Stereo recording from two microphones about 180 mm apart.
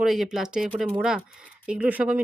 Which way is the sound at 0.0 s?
Centre (ahead or behind).